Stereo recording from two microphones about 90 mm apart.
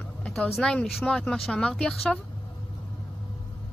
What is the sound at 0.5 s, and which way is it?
Speech, centre (ahead or behind).